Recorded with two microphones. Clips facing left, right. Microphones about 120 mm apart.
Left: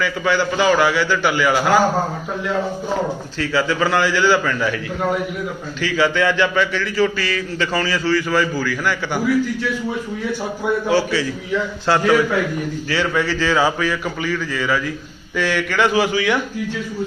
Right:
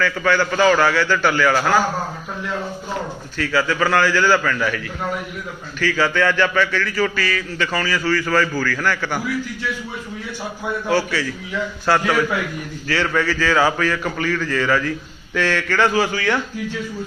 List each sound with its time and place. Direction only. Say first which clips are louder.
0.0 s speech: even; 20° left (ahead or behind)
3.3 s a man's voice: even; 25° left (ahead or behind)
5.8 s a man's voice: left 1 dB; 20° left (ahead or behind)
10.8 s a man's voice: even; 20° left (ahead or behind)
12.9 s speech: right 1 dB; 20° left (ahead or behind)